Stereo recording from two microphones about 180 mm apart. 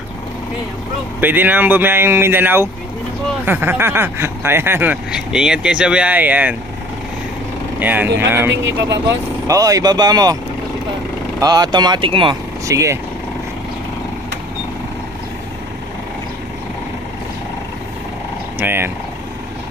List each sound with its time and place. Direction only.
1.2 s speech: 10° right (ahead or behind)
7.8 s speech: 10° right (ahead or behind)
11.3 s speech: 20° right (ahead or behind)
12.6 s speech: 15° right (ahead or behind)
18.6 s speech: 10° right (ahead or behind)